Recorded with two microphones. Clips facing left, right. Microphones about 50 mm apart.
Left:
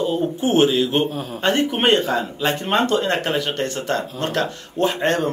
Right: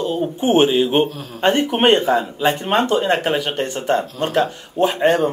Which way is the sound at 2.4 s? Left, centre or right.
Centre.